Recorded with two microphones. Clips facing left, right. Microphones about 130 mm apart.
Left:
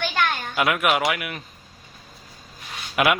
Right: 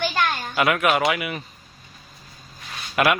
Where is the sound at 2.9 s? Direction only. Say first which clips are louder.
Right 1 dB; 5° left (ahead or behind).